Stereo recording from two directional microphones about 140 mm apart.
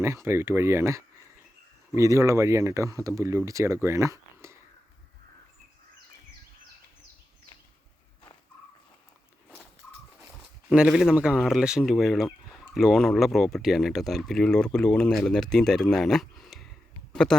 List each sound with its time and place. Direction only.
0.0 s speech: 20° right (ahead or behind)
10.3 s speech: 5° right (ahead or behind)